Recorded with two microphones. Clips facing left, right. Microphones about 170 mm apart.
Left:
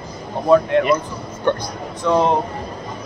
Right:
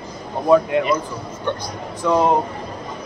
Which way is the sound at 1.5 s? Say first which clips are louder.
Left 6 dB; 55° left (ahead or behind).